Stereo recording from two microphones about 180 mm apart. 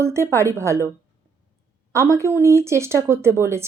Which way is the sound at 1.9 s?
15° right (ahead or behind).